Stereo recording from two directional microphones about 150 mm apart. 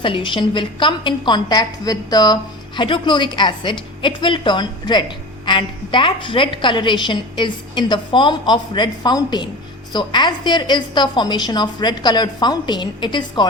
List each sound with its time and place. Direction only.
0.0 s a woman's voice: 35° left (ahead or behind)